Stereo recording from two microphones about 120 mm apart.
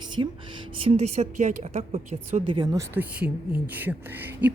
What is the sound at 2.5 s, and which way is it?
Speech, 40° right (ahead or behind).